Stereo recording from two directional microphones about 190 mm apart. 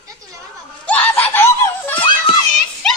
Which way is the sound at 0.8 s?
5° left (ahead or behind).